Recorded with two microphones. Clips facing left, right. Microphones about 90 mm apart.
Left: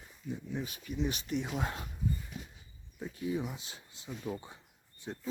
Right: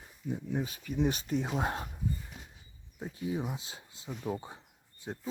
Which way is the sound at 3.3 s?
30° right (ahead or behind).